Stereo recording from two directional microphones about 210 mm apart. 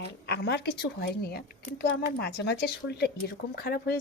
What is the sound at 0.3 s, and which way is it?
Speech, 50° left (ahead or behind).